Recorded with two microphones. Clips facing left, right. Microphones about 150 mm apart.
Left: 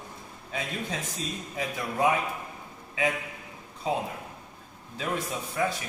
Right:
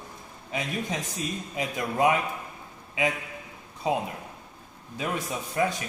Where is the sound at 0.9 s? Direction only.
20° right (ahead or behind).